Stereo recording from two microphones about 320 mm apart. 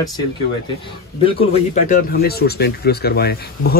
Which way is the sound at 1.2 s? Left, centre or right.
Left.